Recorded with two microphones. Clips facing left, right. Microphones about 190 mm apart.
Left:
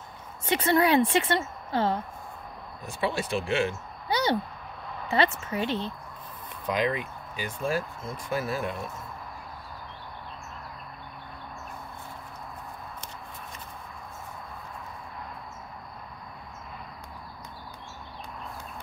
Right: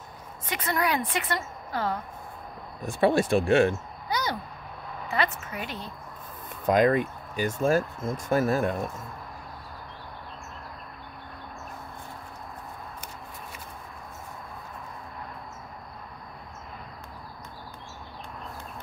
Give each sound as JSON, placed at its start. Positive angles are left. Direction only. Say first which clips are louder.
{"t": 0.5, "sound": "a woman's voice", "louder": "left 5 dB", "side_deg": 25}
{"t": 2.9, "sound": "speech", "louder": "right 7 dB", "side_deg": -50}
{"t": 4.1, "sound": "a sound", "louder": "left 4 dB", "side_deg": 30}
{"t": 5.0, "sound": "a woman's voice", "louder": "left 3 dB", "side_deg": 30}
{"t": 6.6, "sound": "speech", "louder": "right 6 dB", "side_deg": -45}